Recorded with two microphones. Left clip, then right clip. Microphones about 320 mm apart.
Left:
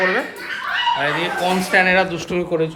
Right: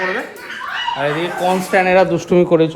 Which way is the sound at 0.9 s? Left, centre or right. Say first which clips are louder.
Right 1 dB; centre.